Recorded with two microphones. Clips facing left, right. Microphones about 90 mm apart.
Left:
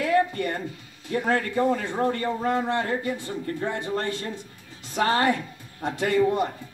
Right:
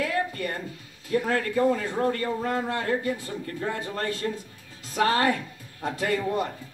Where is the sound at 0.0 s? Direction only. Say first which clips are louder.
Left 5 dB; 30° left (ahead or behind).